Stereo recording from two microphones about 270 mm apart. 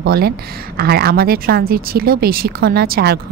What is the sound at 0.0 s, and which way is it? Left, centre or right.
Speech, right.